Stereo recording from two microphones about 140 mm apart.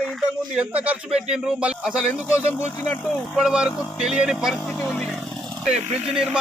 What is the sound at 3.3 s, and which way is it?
Speech, 5° right (ahead or behind).